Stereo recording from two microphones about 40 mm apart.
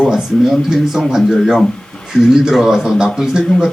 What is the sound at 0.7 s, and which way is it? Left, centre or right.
Speech, centre.